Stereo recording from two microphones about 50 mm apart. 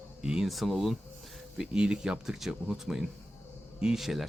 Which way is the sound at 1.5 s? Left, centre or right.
Centre.